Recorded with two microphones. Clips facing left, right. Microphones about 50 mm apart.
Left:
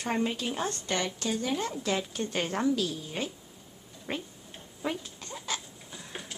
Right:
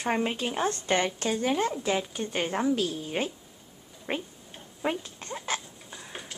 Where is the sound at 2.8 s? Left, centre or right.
Right.